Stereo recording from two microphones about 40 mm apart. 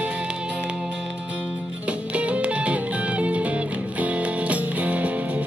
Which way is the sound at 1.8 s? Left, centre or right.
Right.